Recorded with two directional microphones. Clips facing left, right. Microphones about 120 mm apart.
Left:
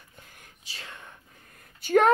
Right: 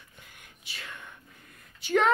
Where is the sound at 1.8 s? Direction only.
50° left (ahead or behind).